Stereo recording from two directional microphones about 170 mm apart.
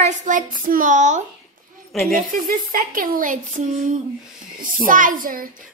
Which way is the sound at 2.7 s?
55° right (ahead or behind).